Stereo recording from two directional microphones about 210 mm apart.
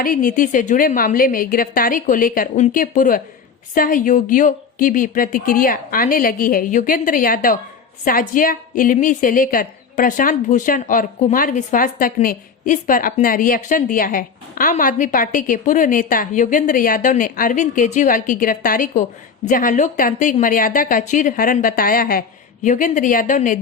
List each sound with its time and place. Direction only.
0.0 s a woman's voice: 40° left (ahead or behind)